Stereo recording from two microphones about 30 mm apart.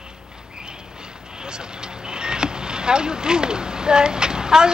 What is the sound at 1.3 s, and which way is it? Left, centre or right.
Speech, right.